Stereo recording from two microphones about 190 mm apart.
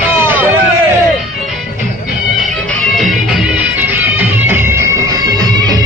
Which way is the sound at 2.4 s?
5° left (ahead or behind).